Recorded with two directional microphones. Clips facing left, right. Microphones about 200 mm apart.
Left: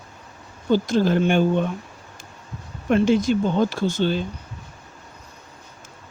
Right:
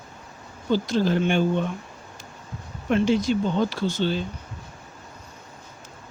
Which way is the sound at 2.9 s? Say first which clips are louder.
Left 3 dB; 50° left (ahead or behind).